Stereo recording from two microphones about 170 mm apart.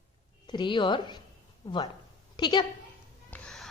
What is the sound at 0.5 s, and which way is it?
Speech, 25° left (ahead or behind).